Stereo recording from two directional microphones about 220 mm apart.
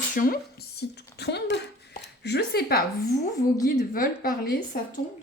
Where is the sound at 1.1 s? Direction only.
50° left (ahead or behind).